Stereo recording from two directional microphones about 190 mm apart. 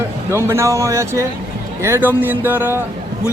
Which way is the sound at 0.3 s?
15° right (ahead or behind).